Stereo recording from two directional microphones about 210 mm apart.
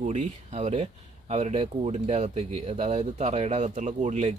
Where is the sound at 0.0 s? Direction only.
35° right (ahead or behind).